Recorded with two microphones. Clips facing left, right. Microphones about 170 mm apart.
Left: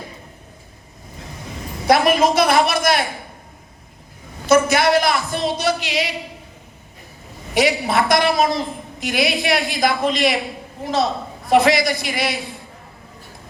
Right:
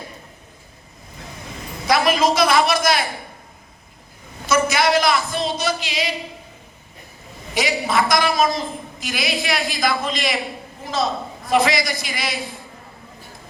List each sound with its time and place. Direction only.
1.9 s a woman's voice: 60° left (ahead or behind)
4.4 s a woman's voice: 60° left (ahead or behind)
7.5 s a woman's voice: 65° left (ahead or behind)
11.4 s a woman's voice: 65° left (ahead or behind)